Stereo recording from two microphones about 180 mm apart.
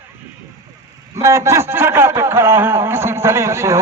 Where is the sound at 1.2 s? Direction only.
15° right (ahead or behind).